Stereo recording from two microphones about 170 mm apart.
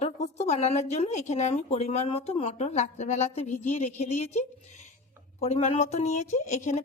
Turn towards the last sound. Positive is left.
turn(degrees=45)  # may be behind; listen again after turning